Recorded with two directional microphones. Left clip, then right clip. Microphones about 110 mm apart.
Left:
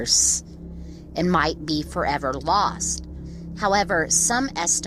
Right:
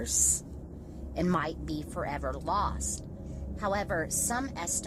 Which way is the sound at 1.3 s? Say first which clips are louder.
Left 13 dB; 45° left (ahead or behind).